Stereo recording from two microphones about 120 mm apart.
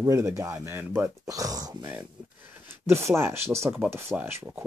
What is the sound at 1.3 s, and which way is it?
Speech, 30° right (ahead or behind).